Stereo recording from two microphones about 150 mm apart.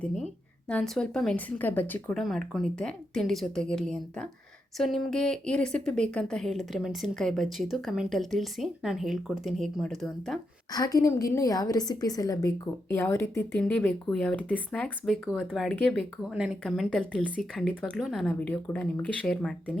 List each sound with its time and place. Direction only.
0.7 s speech: 5° left (ahead or behind)
2.2 s speech: centre (ahead or behind)
10.7 s a woman's voice: 25° left (ahead or behind); by 19.8 s 5° left (ahead or behind)